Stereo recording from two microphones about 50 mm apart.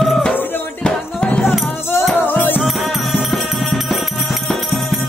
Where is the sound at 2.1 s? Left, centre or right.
Left.